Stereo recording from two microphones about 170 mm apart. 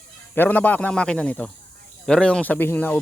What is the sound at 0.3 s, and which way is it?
Speech, 10° left (ahead or behind).